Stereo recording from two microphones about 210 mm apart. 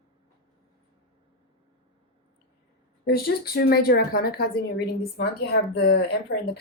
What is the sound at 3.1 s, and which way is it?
Speech, 45° left (ahead or behind).